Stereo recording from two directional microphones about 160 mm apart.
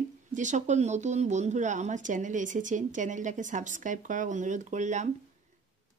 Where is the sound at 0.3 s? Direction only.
50° right (ahead or behind).